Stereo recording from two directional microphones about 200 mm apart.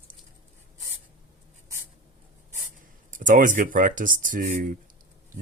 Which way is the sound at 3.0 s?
40° right (ahead or behind).